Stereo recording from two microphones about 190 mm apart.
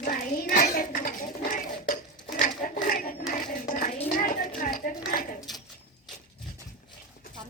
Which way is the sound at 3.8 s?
35° left (ahead or behind).